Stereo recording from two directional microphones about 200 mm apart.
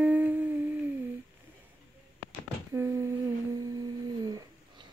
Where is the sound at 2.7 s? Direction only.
15° right (ahead or behind).